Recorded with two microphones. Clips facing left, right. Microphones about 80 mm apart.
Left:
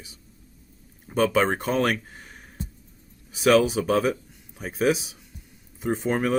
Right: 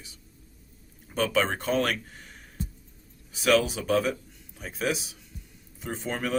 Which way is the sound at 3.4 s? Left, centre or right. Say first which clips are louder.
Left 4 dB; left.